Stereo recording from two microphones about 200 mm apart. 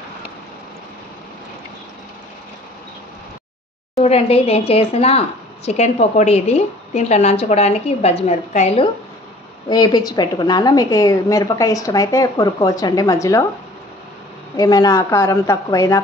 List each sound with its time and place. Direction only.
3.9 s a woman's voice: 30° left (ahead or behind)
9.7 s a woman's voice: 20° left (ahead or behind)
14.6 s a woman's voice: 20° left (ahead or behind)